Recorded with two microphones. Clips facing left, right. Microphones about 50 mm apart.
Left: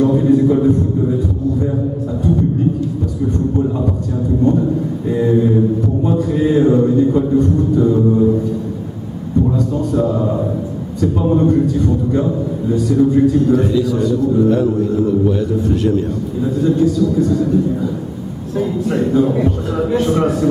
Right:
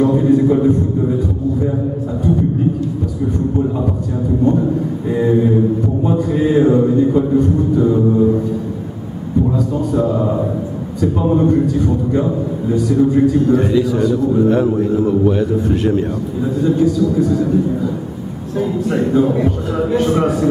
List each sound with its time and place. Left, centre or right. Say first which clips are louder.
0.0 s a man's voice: even; centre
5.1 s music: even; centre
9.5 s music: even; centre
11.0 s a man's voice: even; centre; by 16.1 s right
16.6 s music: even; centre
18.6 s music: even; centre